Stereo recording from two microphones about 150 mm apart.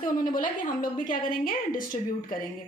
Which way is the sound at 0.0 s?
65° left (ahead or behind).